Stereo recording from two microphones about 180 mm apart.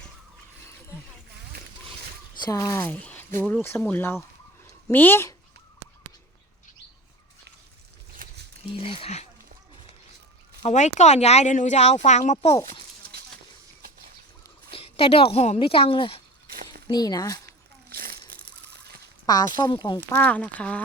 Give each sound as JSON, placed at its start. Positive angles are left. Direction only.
{"t": 2.4, "sound": "speech", "side_deg": 20}
{"t": 8.2, "sound": "a sound", "side_deg": -50}
{"t": 8.6, "sound": "speech", "side_deg": 30}
{"t": 10.6, "sound": "speech", "side_deg": 40}
{"t": 14.7, "sound": "a sound", "side_deg": 30}
{"t": 15.1, "sound": "speech", "side_deg": 35}
{"t": 17.4, "sound": "a sound", "side_deg": -60}
{"t": 19.2, "sound": "speech", "side_deg": 20}
{"t": 20.1, "sound": "speech", "side_deg": 10}